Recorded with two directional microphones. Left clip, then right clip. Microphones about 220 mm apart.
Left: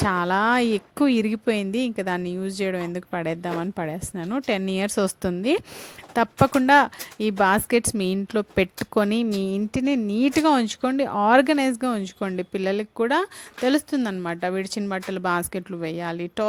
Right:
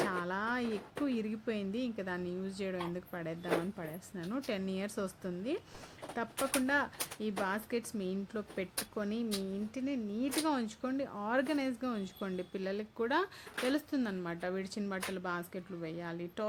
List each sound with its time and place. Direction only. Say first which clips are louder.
0.1 s speech: left 15 dB; 40° left (ahead or behind)